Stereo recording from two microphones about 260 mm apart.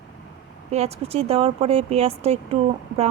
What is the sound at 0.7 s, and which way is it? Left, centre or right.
Speech, right.